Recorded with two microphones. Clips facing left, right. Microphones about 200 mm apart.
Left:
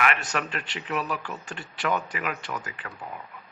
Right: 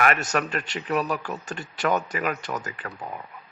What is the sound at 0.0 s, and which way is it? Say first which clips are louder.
Speech: right 4 dB; 45° right (ahead or behind).